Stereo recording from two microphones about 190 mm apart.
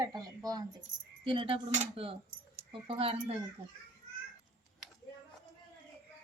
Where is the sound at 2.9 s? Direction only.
30° right (ahead or behind).